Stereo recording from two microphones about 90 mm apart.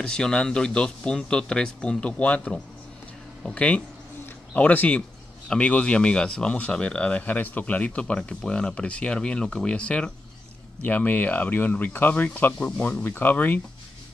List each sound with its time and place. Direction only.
0.0 s speech: 10° left (ahead or behind)